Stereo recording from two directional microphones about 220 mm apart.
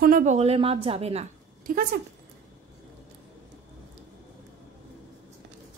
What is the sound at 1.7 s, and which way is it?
Speech, 40° right (ahead or behind).